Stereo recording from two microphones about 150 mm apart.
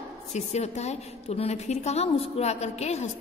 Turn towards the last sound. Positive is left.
turn(degrees=45)  # may be behind; listen again after turning